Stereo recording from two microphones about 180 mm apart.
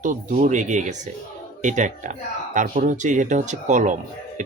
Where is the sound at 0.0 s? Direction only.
45° right (ahead or behind).